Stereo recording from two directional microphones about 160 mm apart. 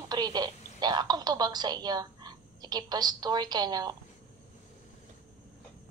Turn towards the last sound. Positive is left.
turn(degrees=-25)  # may be behind; listen again after turning